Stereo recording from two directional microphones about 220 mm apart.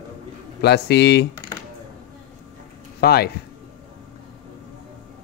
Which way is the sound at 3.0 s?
45° left (ahead or behind).